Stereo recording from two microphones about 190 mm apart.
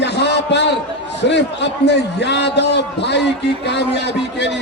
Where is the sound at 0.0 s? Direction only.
65° left (ahead or behind).